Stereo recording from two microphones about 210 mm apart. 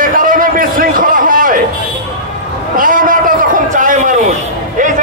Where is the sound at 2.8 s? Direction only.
40° right (ahead or behind).